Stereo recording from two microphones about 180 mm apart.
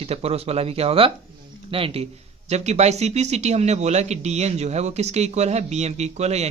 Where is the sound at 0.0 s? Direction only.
35° right (ahead or behind).